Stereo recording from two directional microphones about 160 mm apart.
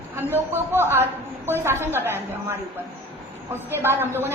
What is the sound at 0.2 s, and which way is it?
A woman's voice, 15° right (ahead or behind).